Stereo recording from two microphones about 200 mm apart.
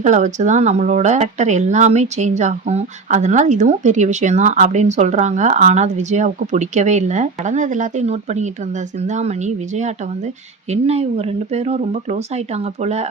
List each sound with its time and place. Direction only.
0.0 s speech: 35° right (ahead or behind)